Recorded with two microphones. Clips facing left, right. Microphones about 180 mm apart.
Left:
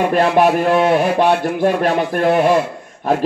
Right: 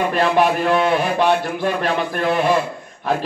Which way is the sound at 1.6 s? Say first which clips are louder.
Left 5 dB; 45° left (ahead or behind).